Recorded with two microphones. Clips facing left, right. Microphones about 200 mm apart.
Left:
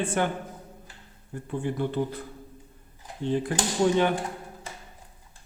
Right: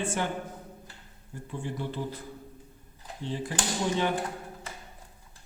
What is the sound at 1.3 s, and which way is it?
Speech, 60° left (ahead or behind).